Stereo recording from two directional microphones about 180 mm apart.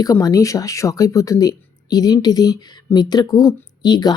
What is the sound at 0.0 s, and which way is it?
Speech, 20° left (ahead or behind).